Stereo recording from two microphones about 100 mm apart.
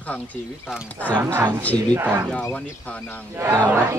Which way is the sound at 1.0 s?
15° left (ahead or behind).